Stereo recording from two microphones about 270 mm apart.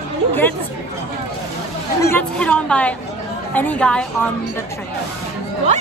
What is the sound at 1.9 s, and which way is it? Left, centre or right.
Speech, centre.